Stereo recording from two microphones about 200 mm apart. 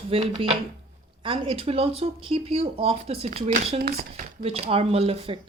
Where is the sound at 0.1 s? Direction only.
30° right (ahead or behind).